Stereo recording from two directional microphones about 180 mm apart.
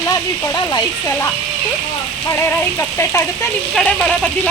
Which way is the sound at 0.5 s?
25° left (ahead or behind).